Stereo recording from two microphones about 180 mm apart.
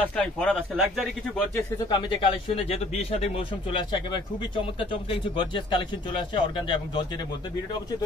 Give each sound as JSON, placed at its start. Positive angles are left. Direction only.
{"t": 0.0, "sound": "speech", "side_deg": 5}
{"t": 1.9, "sound": "speech", "side_deg": 25}